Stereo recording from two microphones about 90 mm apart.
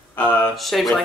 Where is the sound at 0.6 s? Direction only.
Centre (ahead or behind).